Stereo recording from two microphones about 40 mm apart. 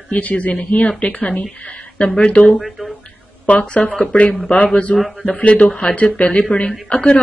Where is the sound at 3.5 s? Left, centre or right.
Left.